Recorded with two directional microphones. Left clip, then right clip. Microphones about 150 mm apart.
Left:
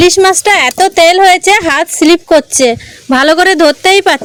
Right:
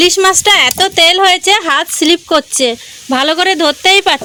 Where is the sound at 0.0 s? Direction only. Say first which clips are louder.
Left 2 dB; 35° left (ahead or behind).